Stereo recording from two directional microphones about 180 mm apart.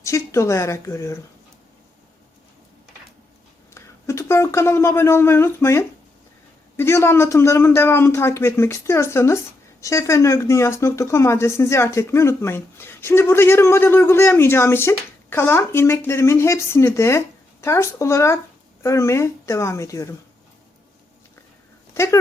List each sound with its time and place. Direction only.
0.0 s speech: 15° left (ahead or behind)
3.8 s speech: 15° left (ahead or behind)
21.9 s speech: 15° left (ahead or behind)